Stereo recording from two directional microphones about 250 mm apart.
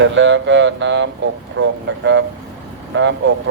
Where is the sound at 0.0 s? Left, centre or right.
Right.